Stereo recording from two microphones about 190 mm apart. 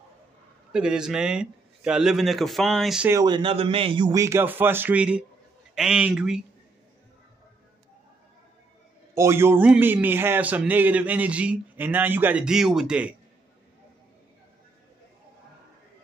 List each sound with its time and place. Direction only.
0.7 s speech: 5° right (ahead or behind)
3.1 s a man's voice: 20° right (ahead or behind); by 6.4 s 5° right (ahead or behind)
9.1 s a man's voice: 15° right (ahead or behind)